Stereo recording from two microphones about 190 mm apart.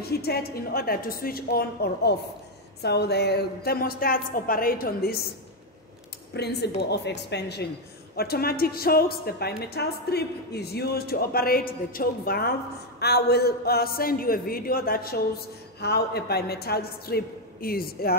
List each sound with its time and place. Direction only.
0.0 s a woman's voice: 55° left (ahead or behind)
6.3 s a woman's voice: 60° left (ahead or behind)